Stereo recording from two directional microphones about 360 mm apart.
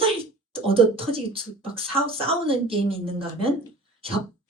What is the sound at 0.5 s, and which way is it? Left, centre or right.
Speech, centre.